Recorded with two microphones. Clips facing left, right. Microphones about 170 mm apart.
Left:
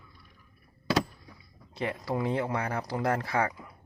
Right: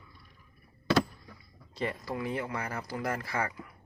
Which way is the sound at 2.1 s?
25° left (ahead or behind).